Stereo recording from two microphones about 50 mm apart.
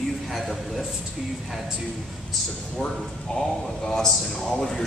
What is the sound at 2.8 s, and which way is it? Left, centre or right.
A man's voice, centre.